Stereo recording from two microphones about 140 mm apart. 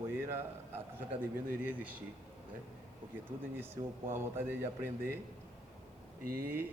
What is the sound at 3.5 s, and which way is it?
A man's voice, 15° right (ahead or behind).